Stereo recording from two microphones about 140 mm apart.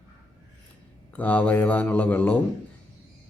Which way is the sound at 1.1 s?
10° left (ahead or behind).